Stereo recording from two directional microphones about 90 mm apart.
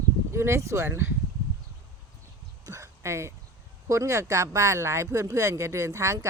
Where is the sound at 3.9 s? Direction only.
35° right (ahead or behind).